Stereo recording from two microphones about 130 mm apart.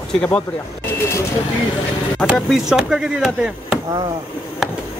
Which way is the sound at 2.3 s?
Centre (ahead or behind).